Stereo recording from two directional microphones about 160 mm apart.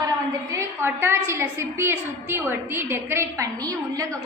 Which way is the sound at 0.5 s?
15° right (ahead or behind).